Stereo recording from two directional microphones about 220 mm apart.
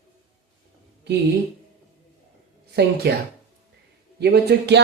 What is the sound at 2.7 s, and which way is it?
Speech, 45° right (ahead or behind).